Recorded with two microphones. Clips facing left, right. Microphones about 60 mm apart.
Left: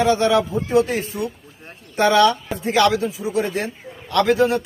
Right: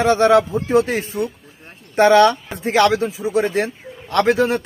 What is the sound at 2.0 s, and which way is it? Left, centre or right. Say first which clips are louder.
A man's voice: right 3 dB; right.